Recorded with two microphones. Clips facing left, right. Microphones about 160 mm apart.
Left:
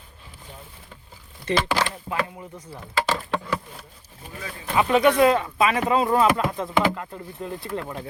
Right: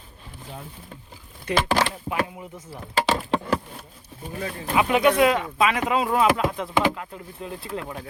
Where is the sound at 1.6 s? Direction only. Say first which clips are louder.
Right 2 dB; 15° right (ahead or behind).